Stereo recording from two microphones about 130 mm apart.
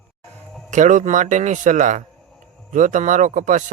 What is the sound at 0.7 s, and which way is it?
Speech, 70° right (ahead or behind).